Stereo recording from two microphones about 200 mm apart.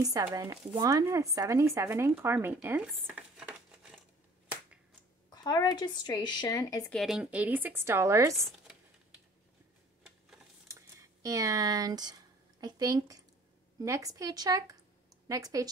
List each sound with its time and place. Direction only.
0.0 s speech: 15° right (ahead or behind)
5.3 s speech: 20° left (ahead or behind)
6.9 s speech: centre (ahead or behind)
10.7 s a sound: 15° right (ahead or behind)
13.7 s speech: 15° right (ahead or behind)